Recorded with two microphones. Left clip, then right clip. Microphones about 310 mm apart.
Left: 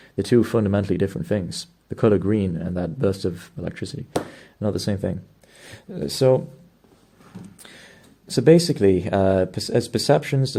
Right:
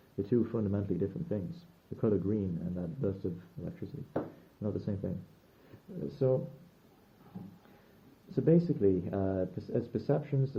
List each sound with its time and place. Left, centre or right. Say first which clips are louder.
0.2 s speech: left 13 dB; left
4.9 s speech: left 13 dB; left
6.1 s speech: left 13 dB; left
8.3 s speech: left 13 dB; left